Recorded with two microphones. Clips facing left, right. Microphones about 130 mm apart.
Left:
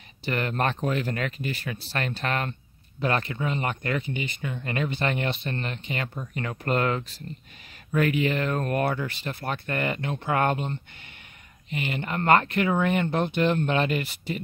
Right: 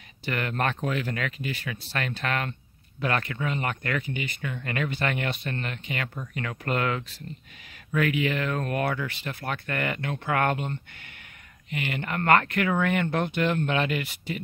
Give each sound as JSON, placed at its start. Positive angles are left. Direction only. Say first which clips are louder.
{"t": 0.2, "sound": "speech", "louder": "left 2 dB", "side_deg": 30}